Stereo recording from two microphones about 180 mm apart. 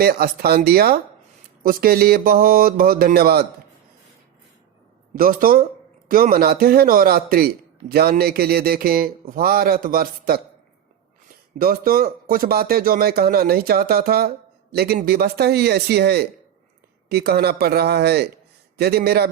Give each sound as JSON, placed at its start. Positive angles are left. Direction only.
{"t": 0.0, "sound": "speech", "side_deg": -60}
{"t": 5.1, "sound": "speech", "side_deg": -50}
{"t": 11.5, "sound": "speech", "side_deg": -55}